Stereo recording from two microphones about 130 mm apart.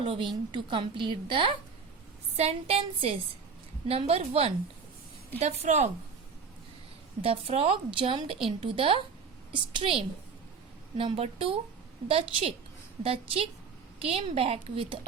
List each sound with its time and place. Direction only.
0.0 s a woman's voice: 45° right (ahead or behind)
2.3 s a woman's voice: 55° right (ahead or behind)
5.4 s a woman's voice: 60° right (ahead or behind)
7.2 s a woman's voice: 50° right (ahead or behind)